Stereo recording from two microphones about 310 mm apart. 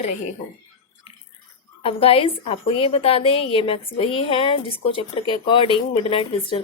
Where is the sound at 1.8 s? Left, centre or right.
Centre.